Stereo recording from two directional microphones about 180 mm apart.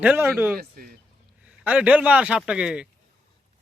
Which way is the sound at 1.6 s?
5° right (ahead or behind).